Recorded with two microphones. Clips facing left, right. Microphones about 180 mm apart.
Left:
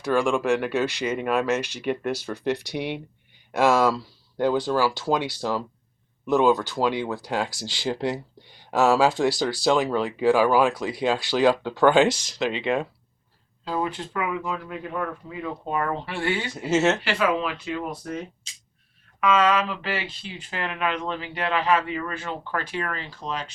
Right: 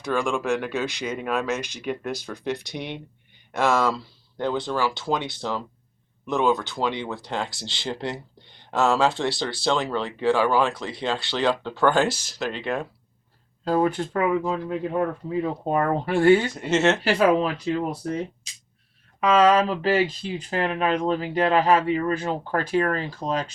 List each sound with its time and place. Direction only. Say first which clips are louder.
0.0 s speech: left 3 dB; 5° left (ahead or behind)
12.0 s speech: left 3 dB; 5° right (ahead or behind)
13.7 s speech: right 6 dB; 45° right (ahead or behind)
16.6 s speech: even; 5° left (ahead or behind)
17.0 s speech: right 5 dB; 40° right (ahead or behind)